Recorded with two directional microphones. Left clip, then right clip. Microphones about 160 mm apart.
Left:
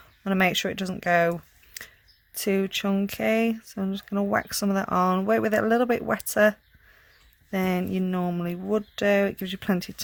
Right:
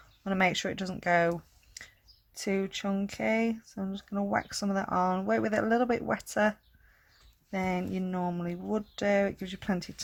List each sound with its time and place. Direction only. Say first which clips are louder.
0.3 s speech: left 4 dB; 30° left (ahead or behind)